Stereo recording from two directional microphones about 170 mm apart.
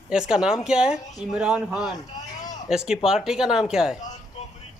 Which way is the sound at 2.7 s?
5° right (ahead or behind).